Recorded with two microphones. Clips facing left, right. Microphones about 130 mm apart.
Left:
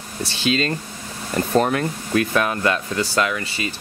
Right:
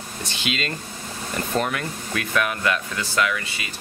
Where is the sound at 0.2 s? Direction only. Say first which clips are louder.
Left 7 dB; 35° left (ahead or behind).